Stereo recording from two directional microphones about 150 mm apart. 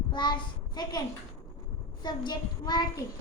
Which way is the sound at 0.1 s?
30° left (ahead or behind).